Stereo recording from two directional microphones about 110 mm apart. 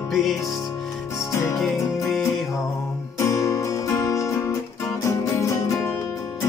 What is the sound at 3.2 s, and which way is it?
Music, 30° left (ahead or behind).